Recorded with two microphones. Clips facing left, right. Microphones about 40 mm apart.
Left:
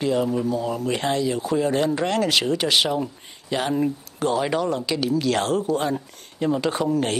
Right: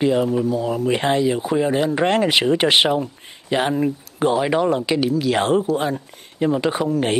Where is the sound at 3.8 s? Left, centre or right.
Right.